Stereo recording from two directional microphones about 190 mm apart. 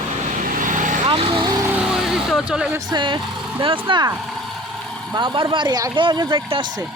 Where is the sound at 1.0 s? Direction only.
30° right (ahead or behind).